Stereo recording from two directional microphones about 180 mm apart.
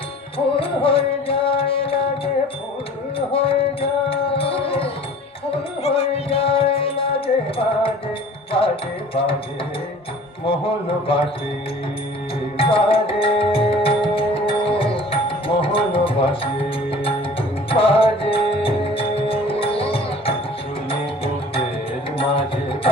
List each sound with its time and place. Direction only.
0.3 s music: 30° left (ahead or behind)
10.8 s music: 30° left (ahead or behind)
12.5 s music: 30° left (ahead or behind)
22.2 s music: 30° left (ahead or behind)